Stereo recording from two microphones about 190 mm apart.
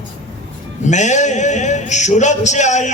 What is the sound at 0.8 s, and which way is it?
A man's voice, 40° left (ahead or behind).